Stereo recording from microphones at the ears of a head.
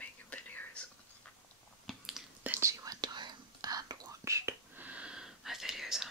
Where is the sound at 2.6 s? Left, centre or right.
Right.